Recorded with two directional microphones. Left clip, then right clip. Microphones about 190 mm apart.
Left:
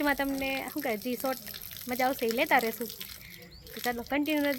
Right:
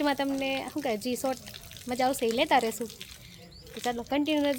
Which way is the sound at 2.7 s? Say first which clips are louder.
Right 1 dB; 40° left (ahead or behind).